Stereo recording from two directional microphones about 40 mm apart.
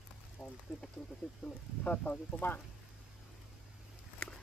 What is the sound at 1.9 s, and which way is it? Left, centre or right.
Speech, left.